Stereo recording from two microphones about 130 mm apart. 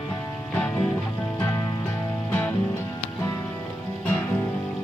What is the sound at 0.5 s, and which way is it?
Music, 15° left (ahead or behind).